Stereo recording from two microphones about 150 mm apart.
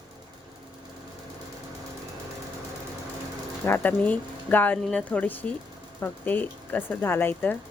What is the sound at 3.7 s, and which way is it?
Speech, 15° left (ahead or behind).